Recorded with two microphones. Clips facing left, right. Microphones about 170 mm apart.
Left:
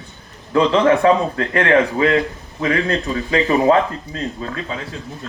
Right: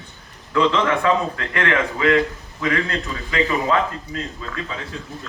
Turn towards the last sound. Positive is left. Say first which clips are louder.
# left 5 dB
turn(degrees=35)  # may be behind; listen again after turning